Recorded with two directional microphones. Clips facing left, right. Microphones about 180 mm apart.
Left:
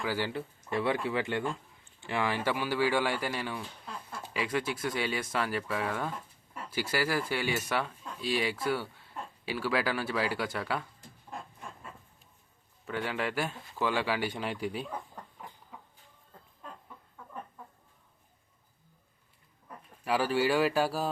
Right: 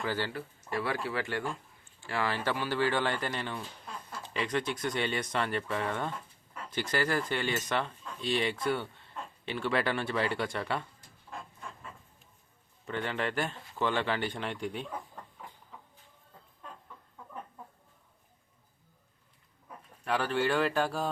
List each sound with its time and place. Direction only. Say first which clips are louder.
0.0 s speech: left 1 dB; 10° left (ahead or behind)
0.3 s speech: left 2 dB; 25° left (ahead or behind); by 10.8 s centre (ahead or behind)
12.8 s speech: even; 5° left (ahead or behind)
20.1 s speech: left 2 dB; 5° left (ahead or behind)